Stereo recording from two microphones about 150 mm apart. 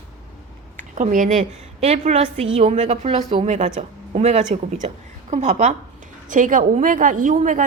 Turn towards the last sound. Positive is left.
turn(degrees=-60)  # may be behind; listen again after turning